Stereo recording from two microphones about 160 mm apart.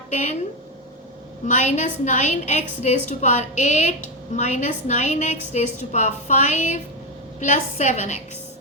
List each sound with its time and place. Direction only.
0.1 s a woman's voice: 50° left (ahead or behind)
1.5 s a woman's voice: 45° left (ahead or behind)